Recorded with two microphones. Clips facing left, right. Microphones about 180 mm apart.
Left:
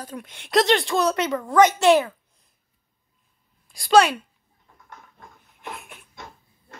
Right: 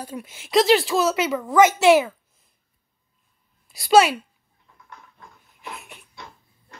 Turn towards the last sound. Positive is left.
turn(degrees=45)  # may be behind; listen again after turning